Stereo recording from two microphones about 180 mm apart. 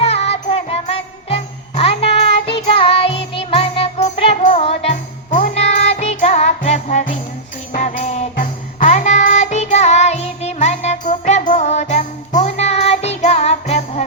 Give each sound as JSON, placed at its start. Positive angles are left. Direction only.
{"t": 0.0, "sound": "jingle bell", "side_deg": 35}
{"t": 7.7, "sound": "music", "side_deg": 45}